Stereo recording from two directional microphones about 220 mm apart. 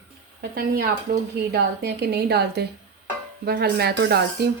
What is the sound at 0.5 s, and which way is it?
Speech, 45° right (ahead or behind).